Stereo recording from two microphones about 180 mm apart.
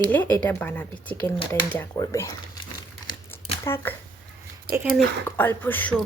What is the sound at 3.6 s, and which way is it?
Speech, 15° left (ahead or behind).